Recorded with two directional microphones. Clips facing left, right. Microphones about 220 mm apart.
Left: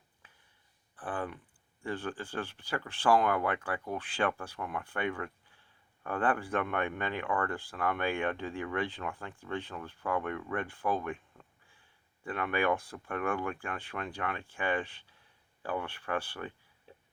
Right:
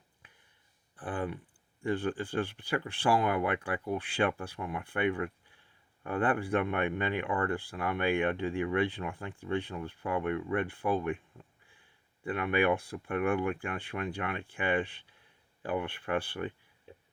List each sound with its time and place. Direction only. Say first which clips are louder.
0.9 s speech: right 2 dB; 15° right (ahead or behind)